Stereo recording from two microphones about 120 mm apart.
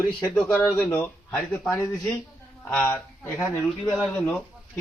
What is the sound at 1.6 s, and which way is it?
Speech, 30° left (ahead or behind).